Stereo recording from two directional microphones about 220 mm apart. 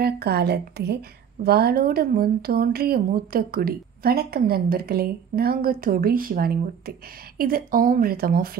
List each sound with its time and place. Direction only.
0.0 s a woman's voice: 45° right (ahead or behind)